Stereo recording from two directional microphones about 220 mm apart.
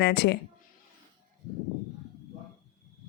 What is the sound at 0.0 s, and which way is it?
Speech, 50° left (ahead or behind).